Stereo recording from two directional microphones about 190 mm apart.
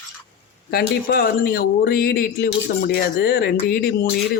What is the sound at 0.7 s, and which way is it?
Speech, 55° left (ahead or behind).